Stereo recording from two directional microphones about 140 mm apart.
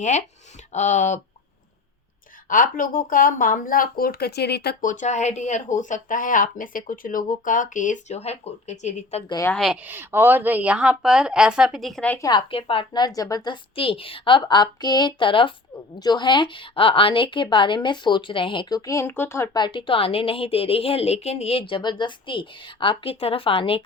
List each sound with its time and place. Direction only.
0.0 s speech: 55° left (ahead or behind)
2.5 s speech: 75° left (ahead or behind); by 4.2 s 90° left
4.8 s speech: 65° left (ahead or behind)
9.5 s speech: 5° left (ahead or behind)
9.8 s a woman's voice: 15° right (ahead or behind); by 12.1 s centre (ahead or behind)
12.3 s a woman's voice: 40° left (ahead or behind); by 19.6 s 20° left (ahead or behind)
19.6 s a woman's voice: 35° left (ahead or behind)